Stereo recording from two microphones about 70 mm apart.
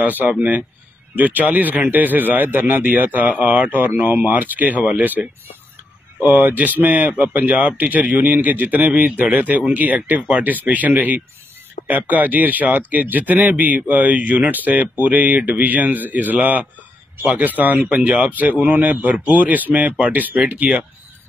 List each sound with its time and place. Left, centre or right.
0.0 s a man's voice: right
6.3 s a man's voice: right